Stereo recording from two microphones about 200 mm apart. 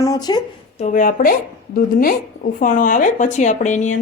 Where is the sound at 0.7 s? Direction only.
40° left (ahead or behind).